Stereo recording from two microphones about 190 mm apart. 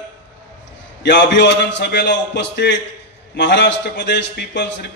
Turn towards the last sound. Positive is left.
turn(degrees=65)  # may be behind; listen again after turning